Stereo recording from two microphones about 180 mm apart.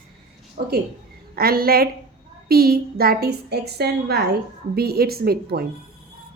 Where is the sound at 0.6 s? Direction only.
60° right (ahead or behind).